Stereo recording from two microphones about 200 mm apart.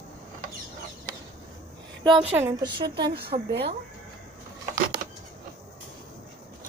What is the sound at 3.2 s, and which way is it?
Speech, 55° right (ahead or behind).